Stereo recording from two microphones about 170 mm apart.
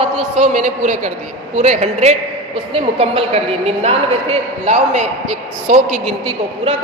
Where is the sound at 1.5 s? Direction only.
40° right (ahead or behind).